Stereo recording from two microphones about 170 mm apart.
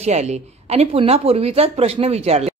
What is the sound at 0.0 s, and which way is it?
Speech, 40° right (ahead or behind).